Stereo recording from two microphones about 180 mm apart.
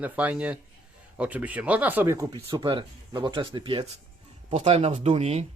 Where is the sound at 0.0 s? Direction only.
10° right (ahead or behind).